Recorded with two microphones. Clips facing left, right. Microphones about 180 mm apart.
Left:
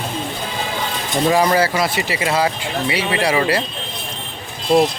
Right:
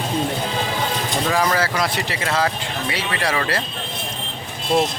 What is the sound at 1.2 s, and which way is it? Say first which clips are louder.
Speech: left 6 dB; 15° left (ahead or behind).